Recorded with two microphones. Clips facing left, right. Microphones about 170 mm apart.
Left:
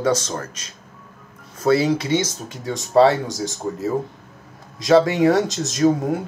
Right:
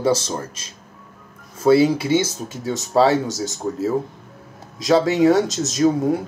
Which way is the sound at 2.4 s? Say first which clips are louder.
Right 2 dB; 5° right (ahead or behind).